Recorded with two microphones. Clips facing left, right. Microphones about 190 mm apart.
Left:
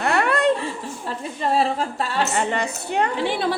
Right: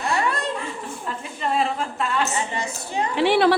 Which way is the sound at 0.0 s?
65° left (ahead or behind).